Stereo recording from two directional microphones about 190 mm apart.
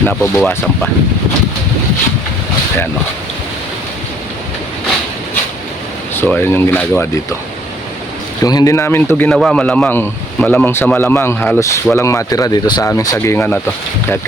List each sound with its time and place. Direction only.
0.0 s speech: 5° left (ahead or behind)
6.1 s a man's voice: 10° left (ahead or behind)
8.4 s a man's voice: 20° left (ahead or behind)